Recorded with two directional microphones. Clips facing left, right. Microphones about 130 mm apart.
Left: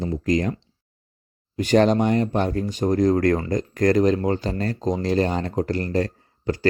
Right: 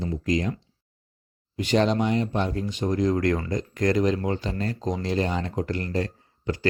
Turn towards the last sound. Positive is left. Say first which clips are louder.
# left 4 dB
turn(degrees=40)  # may be behind; listen again after turning